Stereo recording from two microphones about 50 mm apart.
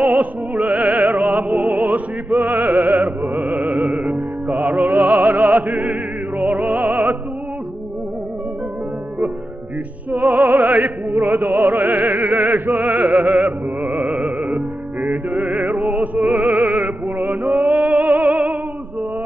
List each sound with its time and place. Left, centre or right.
0.0 s music: right
3.3 s music: right
10.1 s music: right